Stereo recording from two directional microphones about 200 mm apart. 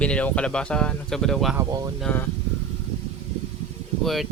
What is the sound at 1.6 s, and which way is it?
Speech, 15° right (ahead or behind).